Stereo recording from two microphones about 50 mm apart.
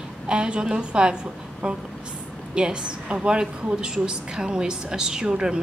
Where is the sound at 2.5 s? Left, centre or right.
Centre.